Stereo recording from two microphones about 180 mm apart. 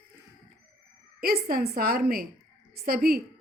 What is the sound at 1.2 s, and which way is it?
Speech, 55° right (ahead or behind).